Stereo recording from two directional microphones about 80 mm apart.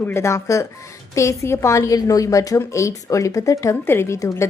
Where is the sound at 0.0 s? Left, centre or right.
Left.